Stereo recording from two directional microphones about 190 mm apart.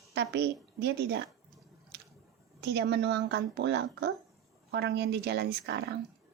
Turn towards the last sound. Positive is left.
turn(degrees=-60)  # may be behind; listen again after turning